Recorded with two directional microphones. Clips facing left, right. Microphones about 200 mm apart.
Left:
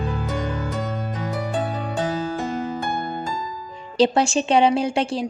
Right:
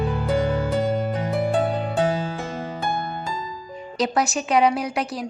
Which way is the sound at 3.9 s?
30° left (ahead or behind).